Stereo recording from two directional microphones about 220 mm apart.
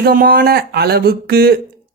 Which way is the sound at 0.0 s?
45° right (ahead or behind).